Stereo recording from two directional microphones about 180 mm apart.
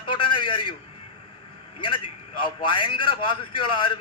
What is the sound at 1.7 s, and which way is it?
A man's voice, 30° left (ahead or behind).